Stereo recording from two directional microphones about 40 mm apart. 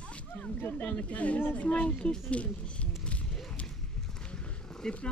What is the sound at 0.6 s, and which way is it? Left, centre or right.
Speech, left.